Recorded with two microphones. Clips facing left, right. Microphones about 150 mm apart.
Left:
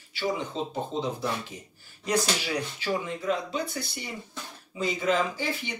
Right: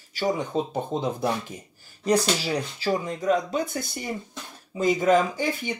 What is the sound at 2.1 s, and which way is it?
Speech, 35° right (ahead or behind).